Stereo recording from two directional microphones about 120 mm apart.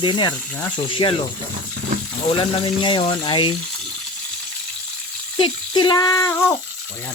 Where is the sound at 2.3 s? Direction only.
40° left (ahead or behind).